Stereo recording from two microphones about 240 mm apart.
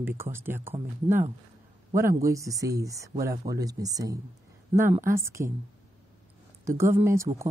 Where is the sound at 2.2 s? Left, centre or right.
Centre.